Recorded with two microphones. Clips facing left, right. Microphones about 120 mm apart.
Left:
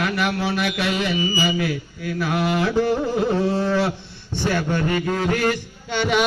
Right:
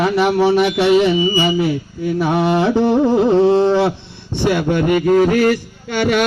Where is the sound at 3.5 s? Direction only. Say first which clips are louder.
Right 7 dB; 25° right (ahead or behind).